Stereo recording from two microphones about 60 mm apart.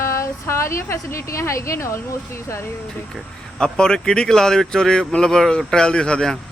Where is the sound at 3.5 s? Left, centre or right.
Centre.